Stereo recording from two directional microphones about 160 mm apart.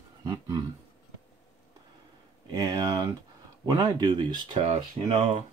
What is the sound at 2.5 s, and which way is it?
Speech, 20° right (ahead or behind).